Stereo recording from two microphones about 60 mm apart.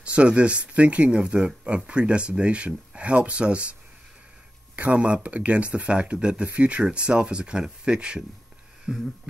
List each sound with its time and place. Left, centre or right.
0.0 s speech: centre
4.7 s speech: right
8.9 s a sound: centre